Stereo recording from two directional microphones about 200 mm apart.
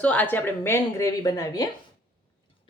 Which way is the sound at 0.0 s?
5° left (ahead or behind).